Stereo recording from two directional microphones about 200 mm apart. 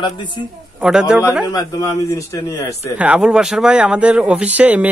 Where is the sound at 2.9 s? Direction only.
5° right (ahead or behind).